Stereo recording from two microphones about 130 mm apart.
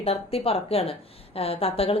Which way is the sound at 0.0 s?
50° left (ahead or behind).